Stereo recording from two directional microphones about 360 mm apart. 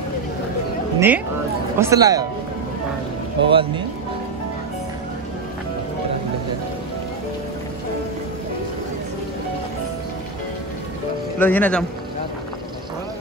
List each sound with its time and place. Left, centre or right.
0.9 s speech: centre
3.4 s speech: centre
11.3 s speech: centre